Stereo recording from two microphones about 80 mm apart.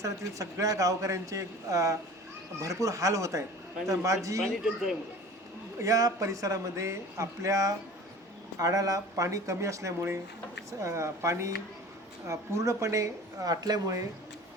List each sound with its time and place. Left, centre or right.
0.0 s speech: right
4.6 s speech: centre
5.8 s speech: right